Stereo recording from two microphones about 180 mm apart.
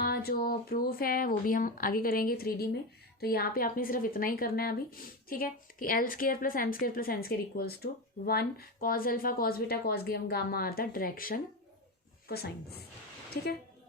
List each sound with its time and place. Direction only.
0.0 s speech: 60° left (ahead or behind)